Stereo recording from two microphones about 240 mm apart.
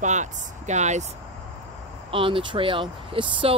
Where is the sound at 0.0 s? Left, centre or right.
Right.